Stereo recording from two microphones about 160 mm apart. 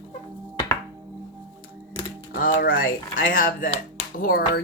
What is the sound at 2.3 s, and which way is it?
Speech, 65° left (ahead or behind).